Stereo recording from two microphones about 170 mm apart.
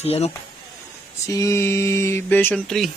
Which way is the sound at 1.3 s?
20° left (ahead or behind).